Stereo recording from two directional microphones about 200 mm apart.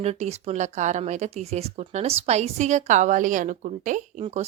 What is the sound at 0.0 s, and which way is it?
Speech, 30° right (ahead or behind).